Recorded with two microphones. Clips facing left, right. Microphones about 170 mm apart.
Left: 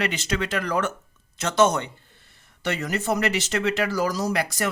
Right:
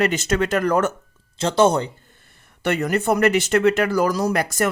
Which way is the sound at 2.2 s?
55° right (ahead or behind).